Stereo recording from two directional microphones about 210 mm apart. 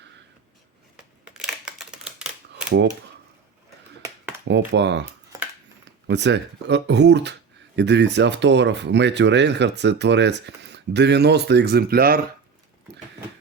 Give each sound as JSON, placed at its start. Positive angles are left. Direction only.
{"t": 1.3, "sound": "typewriter", "side_deg": 0}
{"t": 4.4, "sound": "speech", "side_deg": -55}
{"t": 6.1, "sound": "speech", "side_deg": -55}